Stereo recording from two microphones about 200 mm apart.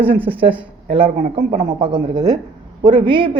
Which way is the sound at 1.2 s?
40° right (ahead or behind).